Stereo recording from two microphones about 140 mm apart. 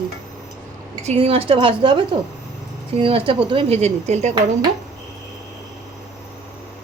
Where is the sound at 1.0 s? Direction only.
45° right (ahead or behind).